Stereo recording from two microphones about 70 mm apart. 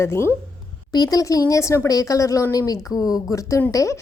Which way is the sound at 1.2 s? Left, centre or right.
Left.